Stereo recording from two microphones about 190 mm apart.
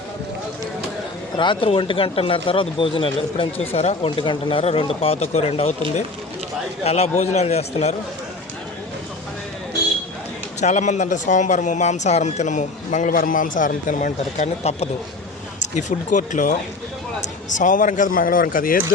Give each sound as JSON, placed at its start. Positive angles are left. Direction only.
{"t": 1.4, "sound": "speech", "side_deg": 25}
{"t": 6.8, "sound": "speech", "side_deg": 35}
{"t": 10.6, "sound": "speech", "side_deg": 40}